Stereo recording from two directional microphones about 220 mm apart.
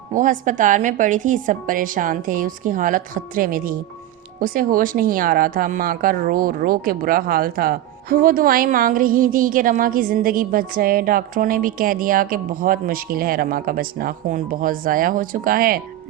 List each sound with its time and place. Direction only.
0.1 s speech: 35° right (ahead or behind)